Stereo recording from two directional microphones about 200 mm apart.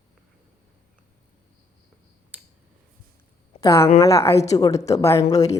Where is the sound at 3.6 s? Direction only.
15° left (ahead or behind).